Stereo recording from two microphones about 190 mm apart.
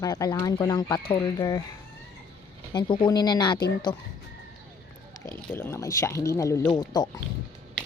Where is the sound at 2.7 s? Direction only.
25° left (ahead or behind).